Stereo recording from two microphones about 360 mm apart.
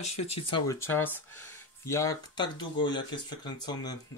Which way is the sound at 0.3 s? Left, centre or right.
Centre.